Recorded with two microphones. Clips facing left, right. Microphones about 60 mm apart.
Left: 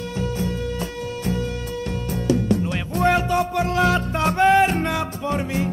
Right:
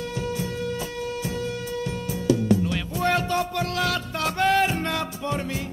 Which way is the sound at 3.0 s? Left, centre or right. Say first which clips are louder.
Left 5 dB; centre.